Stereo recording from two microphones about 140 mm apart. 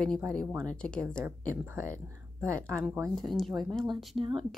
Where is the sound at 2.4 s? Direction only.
20° right (ahead or behind).